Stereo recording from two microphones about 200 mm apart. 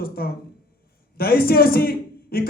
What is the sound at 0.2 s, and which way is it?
Speech, 50° left (ahead or behind).